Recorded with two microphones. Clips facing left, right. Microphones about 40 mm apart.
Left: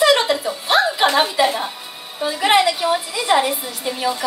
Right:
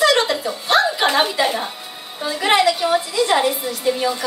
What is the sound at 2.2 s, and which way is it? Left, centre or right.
A woman's voice, centre.